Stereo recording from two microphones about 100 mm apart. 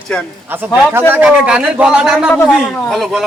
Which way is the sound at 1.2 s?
10° right (ahead or behind).